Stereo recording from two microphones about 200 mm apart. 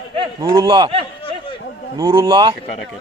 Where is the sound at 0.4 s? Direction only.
20° right (ahead or behind).